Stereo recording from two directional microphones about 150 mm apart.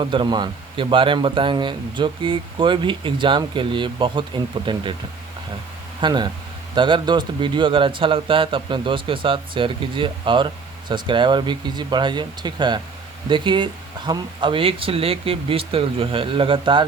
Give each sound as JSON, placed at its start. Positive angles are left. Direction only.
{"t": 0.0, "sound": "speech", "side_deg": -35}
{"t": 6.0, "sound": "speech", "side_deg": -30}